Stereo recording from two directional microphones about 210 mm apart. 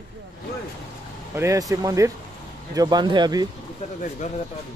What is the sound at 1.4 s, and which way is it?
Speech, 15° right (ahead or behind).